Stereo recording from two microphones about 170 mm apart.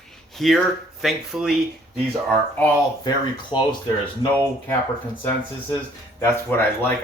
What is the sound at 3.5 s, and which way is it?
Speech, 30° left (ahead or behind).